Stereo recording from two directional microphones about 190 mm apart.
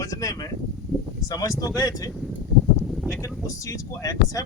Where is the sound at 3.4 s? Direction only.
15° left (ahead or behind).